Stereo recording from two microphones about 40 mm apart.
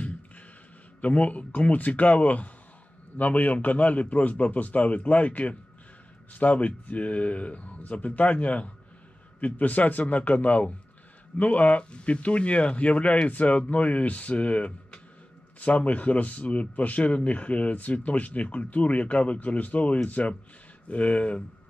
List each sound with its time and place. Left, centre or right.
1.0 s speech: left